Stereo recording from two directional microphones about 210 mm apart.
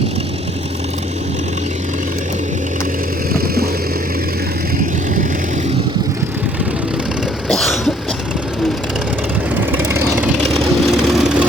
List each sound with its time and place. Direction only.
3.3 s vehicle: 45° right (ahead or behind)
7.4 s cough: centre (ahead or behind)
9.6 s vehicle: 10° right (ahead or behind)